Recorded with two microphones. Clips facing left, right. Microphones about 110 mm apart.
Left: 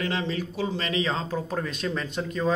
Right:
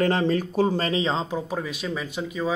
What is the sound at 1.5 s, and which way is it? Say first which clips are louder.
Speech: even; 5° right (ahead or behind).